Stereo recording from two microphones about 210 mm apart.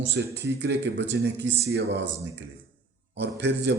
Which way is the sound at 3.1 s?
55° right (ahead or behind).